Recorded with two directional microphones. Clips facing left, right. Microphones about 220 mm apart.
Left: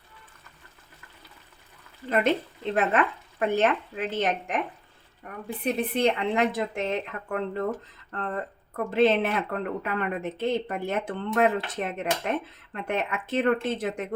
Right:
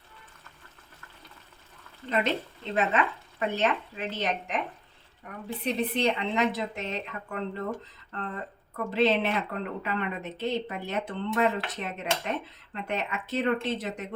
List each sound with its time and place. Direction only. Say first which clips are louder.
2.0 s speech: left 3 dB; 5° left (ahead or behind)
2.7 s a woman's voice: left 2 dB; 50° left (ahead or behind)
5.6 s a woman's voice: left 3 dB; 50° left (ahead or behind)